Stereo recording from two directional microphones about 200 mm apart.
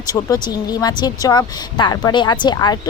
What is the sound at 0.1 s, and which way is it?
Speech, 20° left (ahead or behind).